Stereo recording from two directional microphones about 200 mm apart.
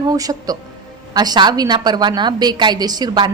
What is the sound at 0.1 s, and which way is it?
A woman's voice, 20° right (ahead or behind).